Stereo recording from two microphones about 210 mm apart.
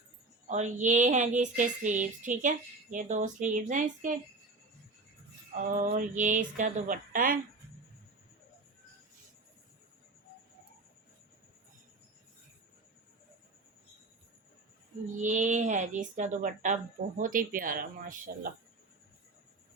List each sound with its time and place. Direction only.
0.4 s speech: 35° right (ahead or behind)
5.5 s speech: 40° right (ahead or behind)
15.2 s speech: 35° right (ahead or behind)